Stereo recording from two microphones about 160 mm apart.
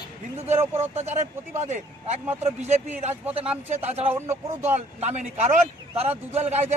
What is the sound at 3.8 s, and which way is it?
Speech, 40° right (ahead or behind).